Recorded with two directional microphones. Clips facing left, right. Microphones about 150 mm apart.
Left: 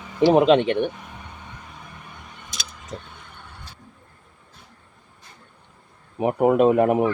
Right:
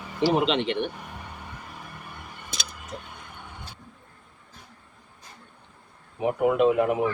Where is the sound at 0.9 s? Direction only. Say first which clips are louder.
Even; 5° right (ahead or behind).